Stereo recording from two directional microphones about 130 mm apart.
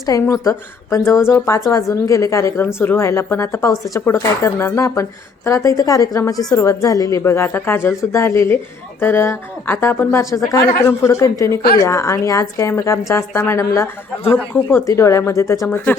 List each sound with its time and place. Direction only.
0.0 s a woman's voice: 25° left (ahead or behind)